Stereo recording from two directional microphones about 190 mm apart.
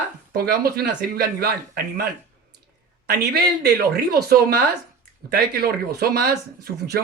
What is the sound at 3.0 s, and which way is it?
A woman's voice, 55° right (ahead or behind).